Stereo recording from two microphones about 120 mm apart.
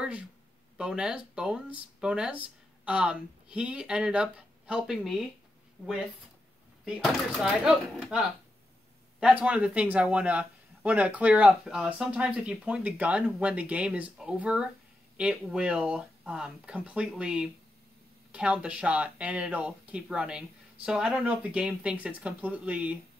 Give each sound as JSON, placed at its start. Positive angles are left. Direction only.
{"t": 0.7, "sound": "speech", "side_deg": -5}
{"t": 6.8, "sound": "speech", "side_deg": 0}
{"t": 9.2, "sound": "speech", "side_deg": -10}